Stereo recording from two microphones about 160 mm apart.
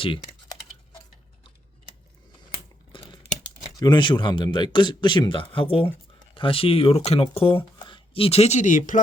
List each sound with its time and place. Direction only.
0.0 s speech: 35° left (ahead or behind)
2.9 s crumpling: 30° left (ahead or behind)
3.8 s speech: 30° left (ahead or behind); by 9.0 s 50° left (ahead or behind)